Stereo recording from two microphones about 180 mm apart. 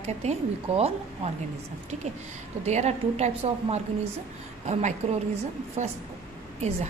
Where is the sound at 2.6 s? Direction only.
40° right (ahead or behind).